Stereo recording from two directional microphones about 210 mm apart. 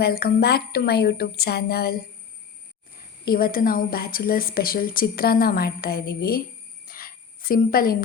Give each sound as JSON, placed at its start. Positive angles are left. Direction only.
{"t": 0.0, "sound": "a woman's voice", "side_deg": 50}
{"t": 3.2, "sound": "a woman's voice", "side_deg": 45}
{"t": 6.8, "sound": "cricket", "side_deg": 45}